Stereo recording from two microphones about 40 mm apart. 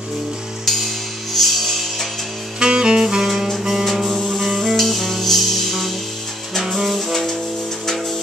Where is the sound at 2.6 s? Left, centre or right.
Right.